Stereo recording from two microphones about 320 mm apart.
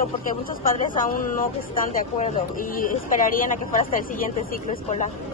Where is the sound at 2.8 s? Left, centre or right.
Left.